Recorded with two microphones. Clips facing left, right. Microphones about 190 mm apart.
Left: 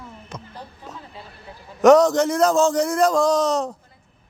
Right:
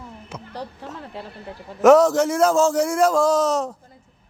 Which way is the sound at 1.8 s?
5° right (ahead or behind).